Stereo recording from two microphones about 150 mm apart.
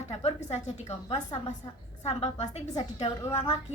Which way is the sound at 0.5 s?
45° left (ahead or behind).